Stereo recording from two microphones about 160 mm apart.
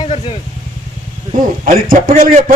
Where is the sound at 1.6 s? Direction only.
60° right (ahead or behind).